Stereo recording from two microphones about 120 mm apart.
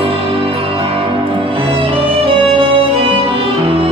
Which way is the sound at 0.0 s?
50° right (ahead or behind).